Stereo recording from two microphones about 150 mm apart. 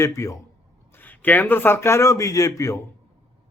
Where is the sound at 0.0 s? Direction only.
20° left (ahead or behind).